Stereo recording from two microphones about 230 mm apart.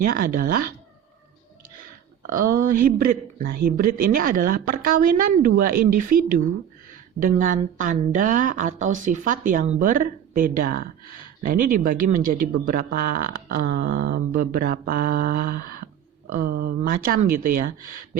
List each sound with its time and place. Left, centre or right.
0.0 s speech: right
2.3 s speech: right
7.2 s speech: right